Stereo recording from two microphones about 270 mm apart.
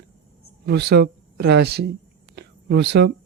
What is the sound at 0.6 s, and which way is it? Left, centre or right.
Speech, right.